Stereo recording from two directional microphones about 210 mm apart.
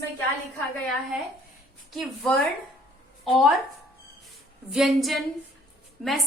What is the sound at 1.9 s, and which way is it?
Speech, centre (ahead or behind).